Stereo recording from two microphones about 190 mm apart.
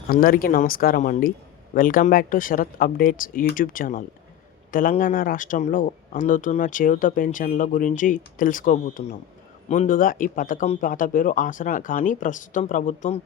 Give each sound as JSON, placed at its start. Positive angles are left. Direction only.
{"t": 0.1, "sound": "speech", "side_deg": 50}